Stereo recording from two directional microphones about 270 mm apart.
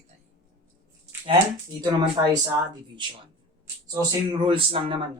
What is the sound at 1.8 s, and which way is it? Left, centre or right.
A man's voice, centre.